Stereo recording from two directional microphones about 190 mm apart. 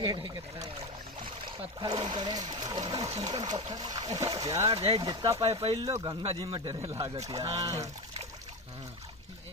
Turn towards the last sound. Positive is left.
turn(degrees=-20)  # may be behind; listen again after turning